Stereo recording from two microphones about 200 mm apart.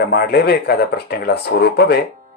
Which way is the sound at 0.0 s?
55° left (ahead or behind).